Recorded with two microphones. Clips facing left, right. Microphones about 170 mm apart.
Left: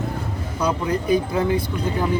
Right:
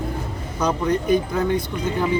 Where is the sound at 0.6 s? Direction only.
10° left (ahead or behind).